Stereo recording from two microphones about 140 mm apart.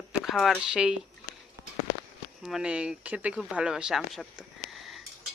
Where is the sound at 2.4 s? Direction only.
5° right (ahead or behind).